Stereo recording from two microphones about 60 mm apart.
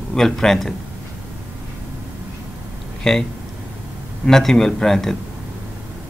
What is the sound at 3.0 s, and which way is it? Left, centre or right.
Speech, centre.